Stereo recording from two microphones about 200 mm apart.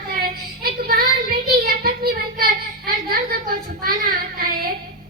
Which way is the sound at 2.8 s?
50° right (ahead or behind).